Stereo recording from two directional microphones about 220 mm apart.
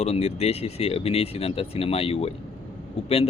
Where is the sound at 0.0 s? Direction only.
30° left (ahead or behind).